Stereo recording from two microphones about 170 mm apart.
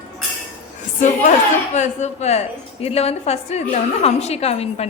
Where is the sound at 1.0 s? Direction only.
45° left (ahead or behind).